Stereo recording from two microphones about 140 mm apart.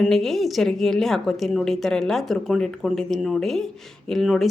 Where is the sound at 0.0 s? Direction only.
Centre (ahead or behind).